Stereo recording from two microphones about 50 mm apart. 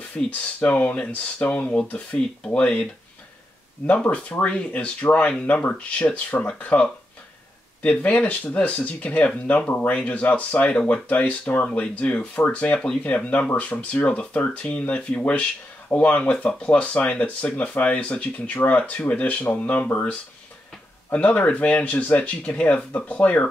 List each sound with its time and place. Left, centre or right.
0.3 s speech: left
3.8 s speech: left
12.7 s speech: centre
13.0 s speech: left